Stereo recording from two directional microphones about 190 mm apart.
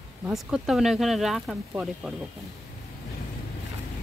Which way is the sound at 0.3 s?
Centre (ahead or behind).